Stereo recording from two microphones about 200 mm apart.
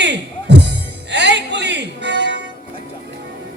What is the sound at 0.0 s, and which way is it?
Music, 60° right (ahead or behind).